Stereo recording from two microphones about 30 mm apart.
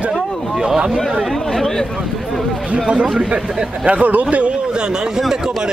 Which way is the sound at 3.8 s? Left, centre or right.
Right.